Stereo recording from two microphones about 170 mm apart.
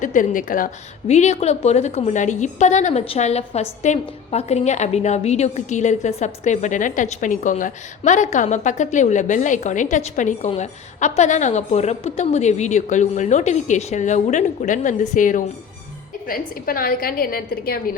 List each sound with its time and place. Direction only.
0.0 s a woman's voice: 50° left (ahead or behind)
1.0 s a woman's voice: 40° left (ahead or behind); by 17.9 s 60° left (ahead or behind)